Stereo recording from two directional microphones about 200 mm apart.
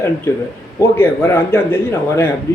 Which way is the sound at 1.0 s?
10° left (ahead or behind).